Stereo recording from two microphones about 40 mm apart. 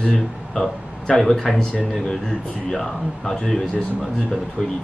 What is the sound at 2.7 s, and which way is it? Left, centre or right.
Speech, centre.